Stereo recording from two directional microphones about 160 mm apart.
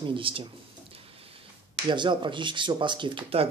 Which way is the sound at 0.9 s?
35° right (ahead or behind).